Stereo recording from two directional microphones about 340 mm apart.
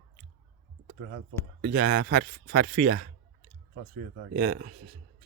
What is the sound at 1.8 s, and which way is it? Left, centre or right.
Speech, right.